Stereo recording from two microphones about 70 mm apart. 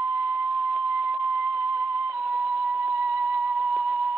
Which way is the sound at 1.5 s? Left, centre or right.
Right.